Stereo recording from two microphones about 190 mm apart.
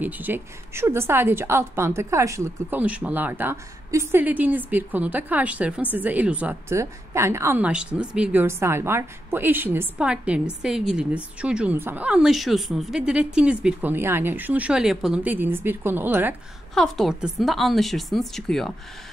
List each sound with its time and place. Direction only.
0.0 s a woman's voice: 10° right (ahead or behind)
16.7 s a woman's voice: centre (ahead or behind)